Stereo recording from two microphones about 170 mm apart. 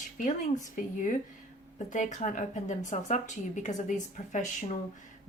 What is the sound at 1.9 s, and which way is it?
Speech, 45° left (ahead or behind).